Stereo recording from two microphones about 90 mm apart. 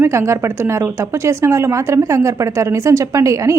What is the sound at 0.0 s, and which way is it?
Speech, 30° right (ahead or behind).